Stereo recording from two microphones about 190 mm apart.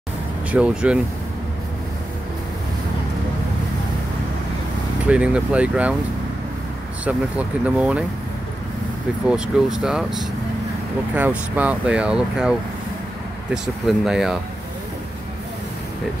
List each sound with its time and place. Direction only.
0.5 s speech: 5° right (ahead or behind)
5.0 s speech: 5° right (ahead or behind)
7.1 s speech: 5° right (ahead or behind)
9.3 s speech: 5° right (ahead or behind)